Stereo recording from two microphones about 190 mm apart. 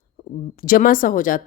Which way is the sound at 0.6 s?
50° left (ahead or behind).